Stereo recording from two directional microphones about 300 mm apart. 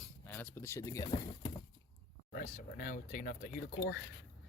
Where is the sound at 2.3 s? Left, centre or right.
Left.